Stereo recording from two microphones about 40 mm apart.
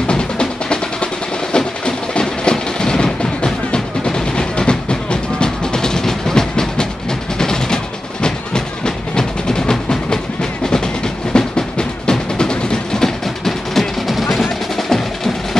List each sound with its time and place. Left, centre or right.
0.0 s music: left
1.5 s train: left
7.3 s music: centre
11.3 s a sound: left
12.1 s music: centre
14.4 s percussion: centre